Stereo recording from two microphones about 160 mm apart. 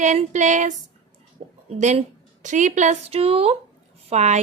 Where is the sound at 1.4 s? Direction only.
45° right (ahead or behind).